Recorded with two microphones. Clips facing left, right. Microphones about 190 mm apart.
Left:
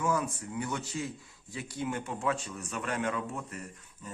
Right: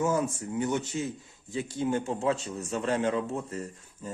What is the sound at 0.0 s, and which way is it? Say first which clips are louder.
A man's voice: right 4 dB; 25° right (ahead or behind).